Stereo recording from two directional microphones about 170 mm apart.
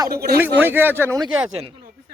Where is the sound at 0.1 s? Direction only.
65° right (ahead or behind).